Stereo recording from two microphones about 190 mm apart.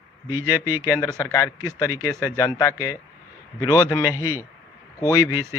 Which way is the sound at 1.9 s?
15° right (ahead or behind).